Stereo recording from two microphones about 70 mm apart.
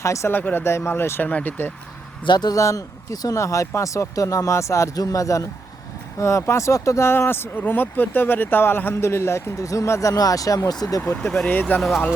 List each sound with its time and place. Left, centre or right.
0.0 s speech: left
0.3 s speech: left
1.3 s speech: left
2.3 s speech: left
2.6 s speech: left
7.1 s speech: left
11.2 s speech: centre